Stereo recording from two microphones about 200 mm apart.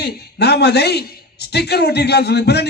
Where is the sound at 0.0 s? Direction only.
55° left (ahead or behind).